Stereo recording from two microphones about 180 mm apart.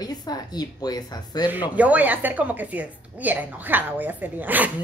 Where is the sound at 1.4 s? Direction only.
10° right (ahead or behind).